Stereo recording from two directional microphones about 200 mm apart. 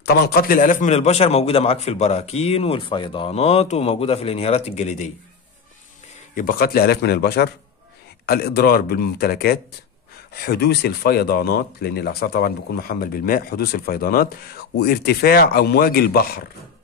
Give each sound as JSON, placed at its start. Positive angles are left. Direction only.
{"t": 0.0, "sound": "a man's voice", "side_deg": 55}
{"t": 6.3, "sound": "speech", "side_deg": 45}